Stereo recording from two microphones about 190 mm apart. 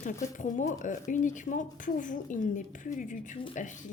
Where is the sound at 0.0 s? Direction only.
40° left (ahead or behind).